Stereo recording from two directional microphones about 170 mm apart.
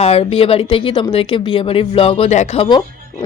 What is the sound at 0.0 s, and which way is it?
Speech, 35° left (ahead or behind).